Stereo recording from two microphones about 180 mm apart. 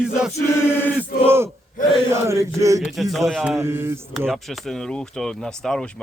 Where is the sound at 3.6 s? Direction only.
15° right (ahead or behind).